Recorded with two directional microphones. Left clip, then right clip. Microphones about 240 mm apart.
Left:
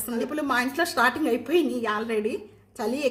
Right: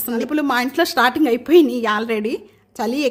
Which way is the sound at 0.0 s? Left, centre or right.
Right.